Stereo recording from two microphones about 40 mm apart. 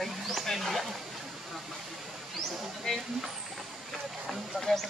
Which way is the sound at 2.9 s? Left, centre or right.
Centre.